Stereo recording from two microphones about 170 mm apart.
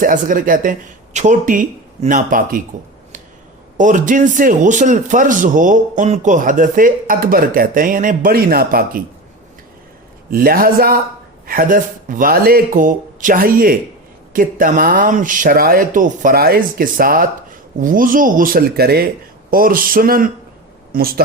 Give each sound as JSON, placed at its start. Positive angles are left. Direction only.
{"t": 0.0, "sound": "a man's voice", "side_deg": -50}
{"t": 3.8, "sound": "a man's voice", "side_deg": -50}
{"t": 10.3, "sound": "a man's voice", "side_deg": -60}